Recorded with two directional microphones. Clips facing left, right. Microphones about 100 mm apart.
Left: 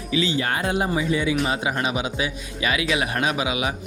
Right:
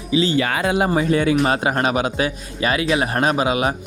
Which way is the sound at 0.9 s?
55° right (ahead or behind).